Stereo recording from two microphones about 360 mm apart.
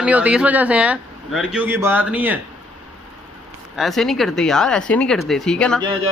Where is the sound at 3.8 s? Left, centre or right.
Centre.